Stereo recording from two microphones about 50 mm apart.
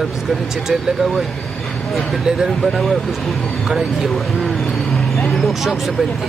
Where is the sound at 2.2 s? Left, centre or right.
Centre.